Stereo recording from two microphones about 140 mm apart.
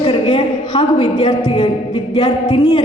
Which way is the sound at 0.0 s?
40° left (ahead or behind).